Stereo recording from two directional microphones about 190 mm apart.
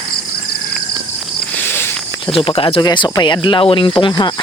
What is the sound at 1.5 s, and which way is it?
Cricket, 10° left (ahead or behind).